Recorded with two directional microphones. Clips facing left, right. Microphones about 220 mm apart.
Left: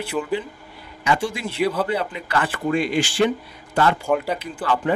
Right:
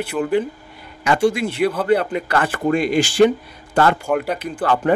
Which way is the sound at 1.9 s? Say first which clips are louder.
Right 7 dB; 50° right (ahead or behind).